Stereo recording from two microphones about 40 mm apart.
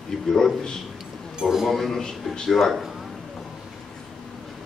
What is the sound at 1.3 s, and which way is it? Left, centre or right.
Speech, centre.